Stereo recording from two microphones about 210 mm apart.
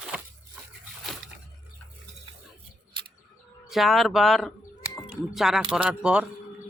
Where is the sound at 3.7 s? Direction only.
Centre (ahead or behind).